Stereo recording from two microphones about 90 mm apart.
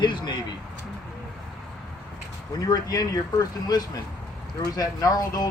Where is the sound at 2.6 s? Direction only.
45° left (ahead or behind).